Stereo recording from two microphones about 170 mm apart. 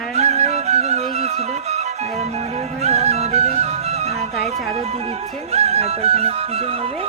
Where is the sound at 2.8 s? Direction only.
40° right (ahead or behind).